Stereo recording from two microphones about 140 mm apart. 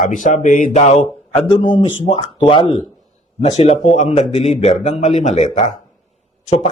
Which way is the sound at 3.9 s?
55° left (ahead or behind).